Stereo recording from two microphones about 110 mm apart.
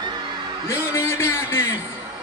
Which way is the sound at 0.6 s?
20° left (ahead or behind).